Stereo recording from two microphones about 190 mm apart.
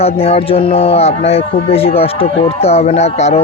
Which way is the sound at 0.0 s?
30° left (ahead or behind).